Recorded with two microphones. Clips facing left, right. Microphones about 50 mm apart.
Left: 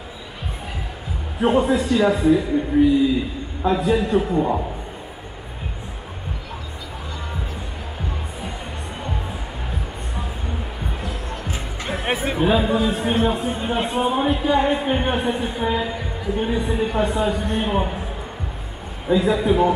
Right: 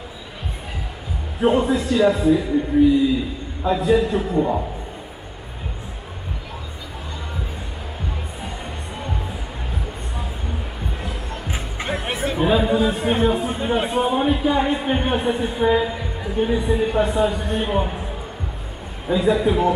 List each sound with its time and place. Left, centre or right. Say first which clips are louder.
1.4 s speech: even; centre
3.6 s speech: right 1 dB; centre
11.4 s music: right 1 dB; centre
12.0 s chatter: left 5 dB; centre
12.4 s speech: right 2 dB; centre
19.0 s speech: even; centre